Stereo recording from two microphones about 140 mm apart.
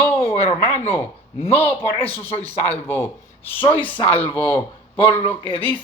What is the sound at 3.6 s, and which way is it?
Speech, 35° left (ahead or behind).